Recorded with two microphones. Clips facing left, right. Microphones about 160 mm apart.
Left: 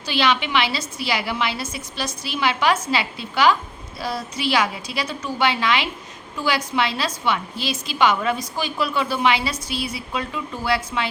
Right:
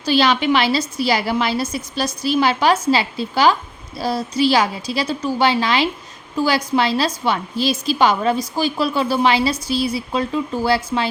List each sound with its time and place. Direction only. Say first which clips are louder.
0.0 s a woman's voice: right 5 dB; 40° right (ahead or behind)